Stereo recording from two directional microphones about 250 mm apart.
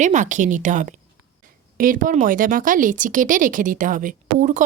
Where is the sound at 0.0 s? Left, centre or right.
Right.